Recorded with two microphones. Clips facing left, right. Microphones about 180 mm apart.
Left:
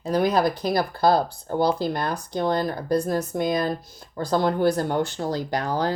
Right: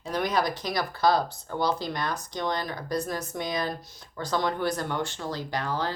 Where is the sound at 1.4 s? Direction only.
35° left (ahead or behind).